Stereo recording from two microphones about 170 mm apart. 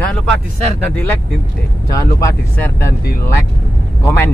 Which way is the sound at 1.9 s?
15° left (ahead or behind).